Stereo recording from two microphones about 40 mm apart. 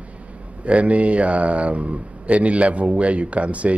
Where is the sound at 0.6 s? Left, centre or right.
Right.